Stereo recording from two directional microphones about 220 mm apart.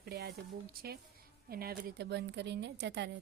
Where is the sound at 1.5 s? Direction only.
45° right (ahead or behind).